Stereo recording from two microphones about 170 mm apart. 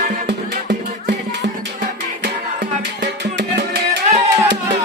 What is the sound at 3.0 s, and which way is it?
Music, 85° right.